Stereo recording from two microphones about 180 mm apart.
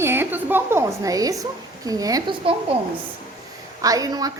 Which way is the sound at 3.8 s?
20° right (ahead or behind).